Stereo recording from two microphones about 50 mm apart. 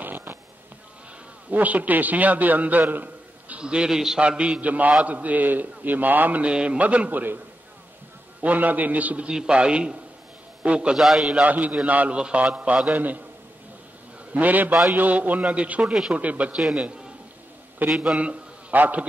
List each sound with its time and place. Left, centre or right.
0.0 s a sound: right
1.5 s a man's voice: right
3.5 s a man's voice: centre
4.2 s a man's voice: centre; by 6.4 s right
6.4 s a man's voice: centre
7.1 s a man's voice: right
8.4 s a man's voice: right
9.3 s a man's voice: centre
11.0 s a man's voice: centre
11.4 s a man's voice: right
12.9 s a man's voice: right
14.3 s a man's voice: right
17.8 s a man's voice: centre
18.7 s a man's voice: right